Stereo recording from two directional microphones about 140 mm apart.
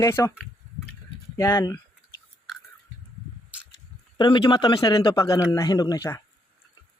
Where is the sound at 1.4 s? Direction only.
25° left (ahead or behind).